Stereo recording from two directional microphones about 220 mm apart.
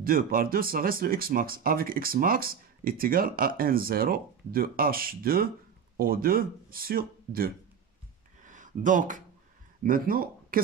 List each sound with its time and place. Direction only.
0.0 s speech: 40° right (ahead or behind)
8.4 s a sound: 35° right (ahead or behind)
9.8 s speech: 40° right (ahead or behind)